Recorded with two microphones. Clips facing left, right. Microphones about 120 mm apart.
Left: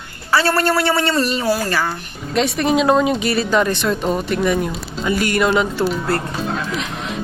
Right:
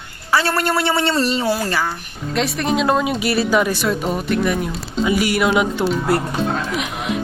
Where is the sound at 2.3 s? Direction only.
Centre (ahead or behind).